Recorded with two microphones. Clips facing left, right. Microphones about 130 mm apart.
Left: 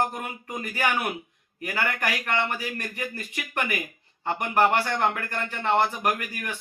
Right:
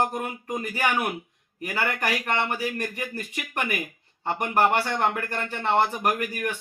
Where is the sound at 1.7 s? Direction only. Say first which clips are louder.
Right 1 dB; 15° right (ahead or behind).